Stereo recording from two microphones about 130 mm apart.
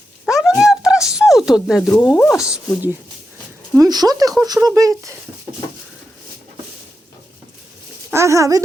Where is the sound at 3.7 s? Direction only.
30° right (ahead or behind).